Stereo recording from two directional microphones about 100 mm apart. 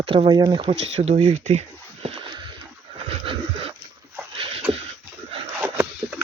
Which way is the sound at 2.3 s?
55° right (ahead or behind).